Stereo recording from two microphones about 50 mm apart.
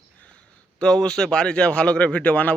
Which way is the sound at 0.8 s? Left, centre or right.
Left.